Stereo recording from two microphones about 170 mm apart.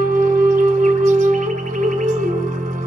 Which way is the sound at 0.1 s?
50° right (ahead or behind).